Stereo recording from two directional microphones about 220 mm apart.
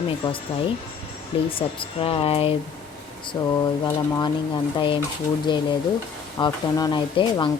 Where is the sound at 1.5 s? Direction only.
25° left (ahead or behind).